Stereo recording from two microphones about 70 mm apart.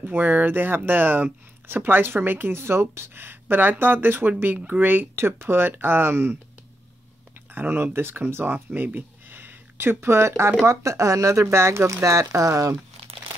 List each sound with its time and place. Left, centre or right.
0.0 s speech: right
7.5 s speech: right